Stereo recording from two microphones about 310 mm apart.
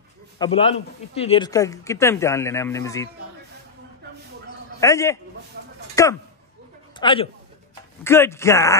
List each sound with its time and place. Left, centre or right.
0.4 s speech: centre
4.7 s a man's voice: centre